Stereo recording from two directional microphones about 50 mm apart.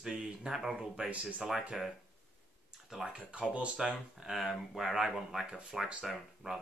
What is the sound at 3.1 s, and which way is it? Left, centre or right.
Speech, right.